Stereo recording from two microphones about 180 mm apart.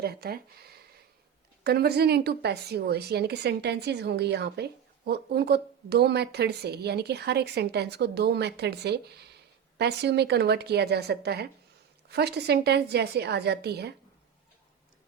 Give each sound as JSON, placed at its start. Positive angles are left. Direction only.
{"t": 0.0, "sound": "a woman's voice", "side_deg": -60}
{"t": 1.6, "sound": "a woman's voice", "side_deg": -60}